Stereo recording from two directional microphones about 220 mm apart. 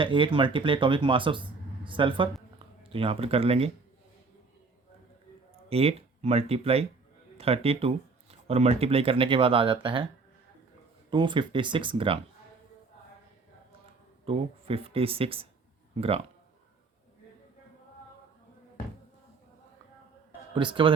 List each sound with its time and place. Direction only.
0.0 s speech: 25° right (ahead or behind)
5.6 s speech: 25° right (ahead or behind)
11.1 s speech: 20° right (ahead or behind)
14.3 s speech: 25° right (ahead or behind)
20.5 s speech: 20° right (ahead or behind)